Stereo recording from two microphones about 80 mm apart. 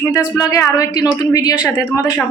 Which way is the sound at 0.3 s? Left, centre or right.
Left.